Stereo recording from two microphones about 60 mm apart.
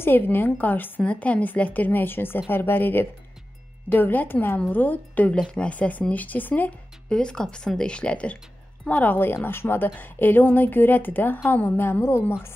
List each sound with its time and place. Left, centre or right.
0.0 s a woman's voice: left
7.1 s a woman's voice: centre; by 12.5 s left